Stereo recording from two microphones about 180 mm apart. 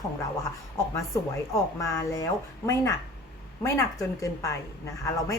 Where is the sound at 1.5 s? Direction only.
20° left (ahead or behind).